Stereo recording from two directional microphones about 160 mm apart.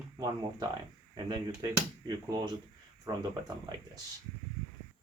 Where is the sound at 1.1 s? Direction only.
25° right (ahead or behind).